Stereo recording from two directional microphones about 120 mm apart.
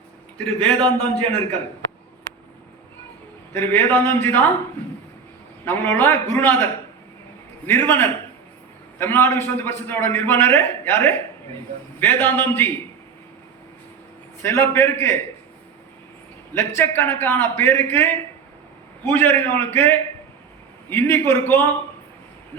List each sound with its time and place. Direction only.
0.3 s a man's voice: 10° left (ahead or behind)
3.5 s a man's voice: 15° left (ahead or behind)
5.6 s a man's voice: 20° left (ahead or behind)
7.7 s a man's voice: 15° left (ahead or behind)
14.4 s a man's voice: 20° left (ahead or behind)
16.6 s a man's voice: 20° left (ahead or behind)